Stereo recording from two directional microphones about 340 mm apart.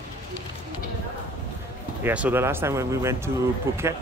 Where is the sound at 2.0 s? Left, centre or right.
Centre.